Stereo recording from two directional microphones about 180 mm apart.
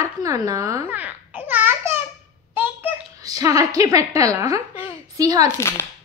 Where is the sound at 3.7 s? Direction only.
20° right (ahead or behind).